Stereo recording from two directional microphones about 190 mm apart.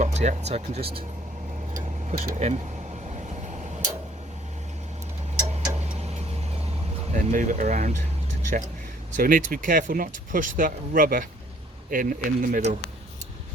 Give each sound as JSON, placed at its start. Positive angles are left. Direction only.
{"t": 0.0, "sound": "speech", "side_deg": -35}
{"t": 2.0, "sound": "speech", "side_deg": -35}
{"t": 5.8, "sound": "tick-tock", "side_deg": -35}
{"t": 7.1, "sound": "speech", "side_deg": -40}
{"t": 9.1, "sound": "speech", "side_deg": -45}